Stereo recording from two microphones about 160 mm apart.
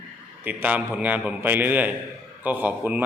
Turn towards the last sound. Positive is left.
turn(degrees=-10)  # may be behind; listen again after turning